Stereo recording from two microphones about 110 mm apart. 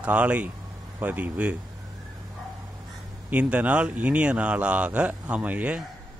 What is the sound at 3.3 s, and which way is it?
Speech, 15° right (ahead or behind).